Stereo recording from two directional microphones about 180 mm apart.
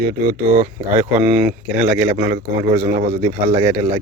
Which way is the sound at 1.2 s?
10° right (ahead or behind).